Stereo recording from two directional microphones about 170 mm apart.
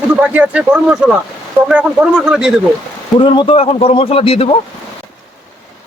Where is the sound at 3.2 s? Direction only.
30° left (ahead or behind).